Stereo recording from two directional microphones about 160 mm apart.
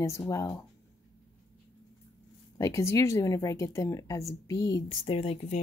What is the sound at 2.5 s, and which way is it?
Speech, 20° left (ahead or behind).